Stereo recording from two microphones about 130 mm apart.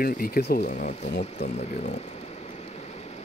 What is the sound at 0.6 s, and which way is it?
Speech, 80° left.